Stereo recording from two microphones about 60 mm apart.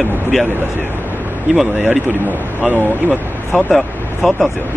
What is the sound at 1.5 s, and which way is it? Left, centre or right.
Speech, centre.